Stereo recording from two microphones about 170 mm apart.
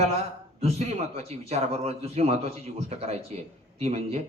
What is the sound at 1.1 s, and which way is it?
A man's voice, 40° right (ahead or behind).